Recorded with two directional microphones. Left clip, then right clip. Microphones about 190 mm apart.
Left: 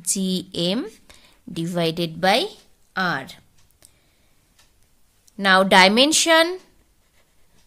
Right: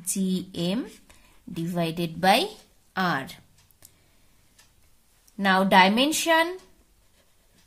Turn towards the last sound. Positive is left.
turn(degrees=40)  # may be behind; listen again after turning